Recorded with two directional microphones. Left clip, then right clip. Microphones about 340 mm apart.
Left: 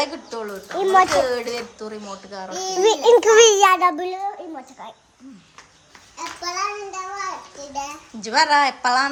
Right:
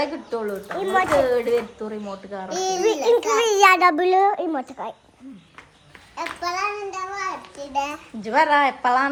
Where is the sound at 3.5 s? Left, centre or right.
Centre.